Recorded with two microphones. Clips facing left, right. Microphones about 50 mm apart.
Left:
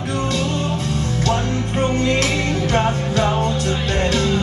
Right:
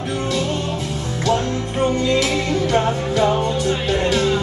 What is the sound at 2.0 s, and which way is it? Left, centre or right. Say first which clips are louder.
Music: right 1 dB; left.